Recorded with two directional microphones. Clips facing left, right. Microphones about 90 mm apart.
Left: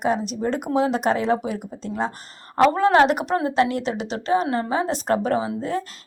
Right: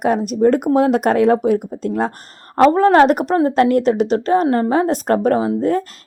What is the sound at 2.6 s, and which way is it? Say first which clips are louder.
Speech: right 5 dB; 40° right (ahead or behind).